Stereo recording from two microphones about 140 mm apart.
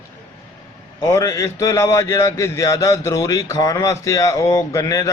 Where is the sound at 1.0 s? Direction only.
25° left (ahead or behind).